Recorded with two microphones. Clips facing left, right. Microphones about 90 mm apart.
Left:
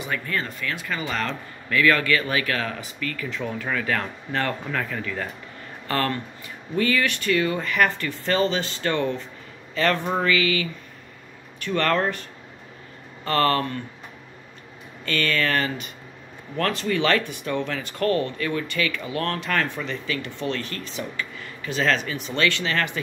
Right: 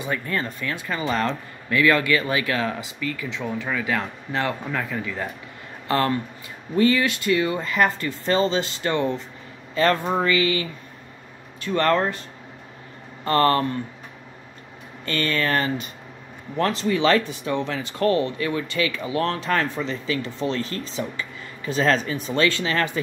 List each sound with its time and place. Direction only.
0.0 s speech: 25° right (ahead or behind); by 5.3 s 10° right (ahead or behind)
5.9 s speech: 25° right (ahead or behind)
10.2 s speech: 30° right (ahead or behind)
11.7 s speech: 30° right (ahead or behind)
15.0 s speech: 35° right (ahead or behind)